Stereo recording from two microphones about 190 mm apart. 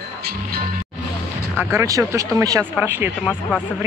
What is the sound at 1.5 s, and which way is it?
Speech, 15° right (ahead or behind).